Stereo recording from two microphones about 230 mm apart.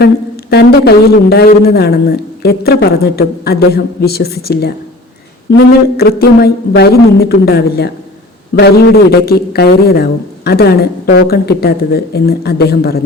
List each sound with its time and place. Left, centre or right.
0.5 s a man's voice: left